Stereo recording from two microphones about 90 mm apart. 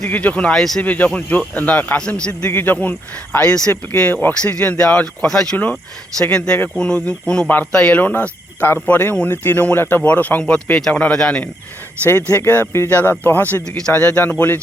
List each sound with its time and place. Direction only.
0.1 s speech: 15° left (ahead or behind)
0.8 s speech: 15° left (ahead or behind)
2.5 s speech: 25° left (ahead or behind)
3.3 s speech: 10° left (ahead or behind)
12.0 s speech: 20° left (ahead or behind)